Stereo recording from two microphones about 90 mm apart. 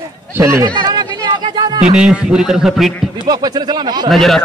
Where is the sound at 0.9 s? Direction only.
50° right (ahead or behind).